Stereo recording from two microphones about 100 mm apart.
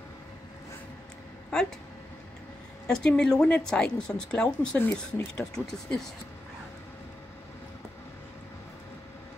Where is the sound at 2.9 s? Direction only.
10° left (ahead or behind).